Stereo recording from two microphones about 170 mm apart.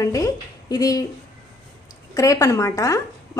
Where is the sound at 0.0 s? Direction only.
20° left (ahead or behind).